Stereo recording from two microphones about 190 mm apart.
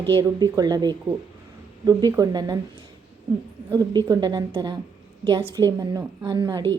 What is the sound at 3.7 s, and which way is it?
A woman's voice, 20° right (ahead or behind).